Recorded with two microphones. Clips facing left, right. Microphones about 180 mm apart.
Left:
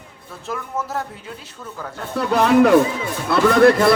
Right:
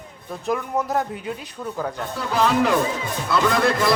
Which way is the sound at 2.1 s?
60° left (ahead or behind).